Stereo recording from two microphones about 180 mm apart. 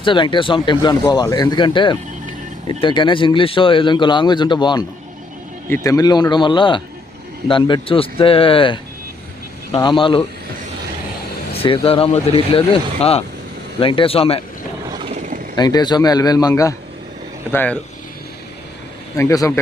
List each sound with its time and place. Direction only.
0.0 s speech: 25° left (ahead or behind)
11.5 s speech: 30° left (ahead or behind)
15.1 s vehicle: 40° right (ahead or behind)
15.5 s a man's voice: 25° left (ahead or behind)
19.1 s a man's voice: 20° left (ahead or behind)